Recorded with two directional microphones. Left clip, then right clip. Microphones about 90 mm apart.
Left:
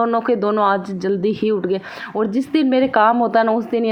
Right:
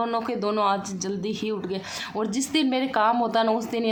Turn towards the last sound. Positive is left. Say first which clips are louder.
# left 7 dB
turn(degrees=40)  # may be behind; listen again after turning